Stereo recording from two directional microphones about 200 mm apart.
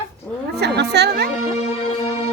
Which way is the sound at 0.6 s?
55° right (ahead or behind).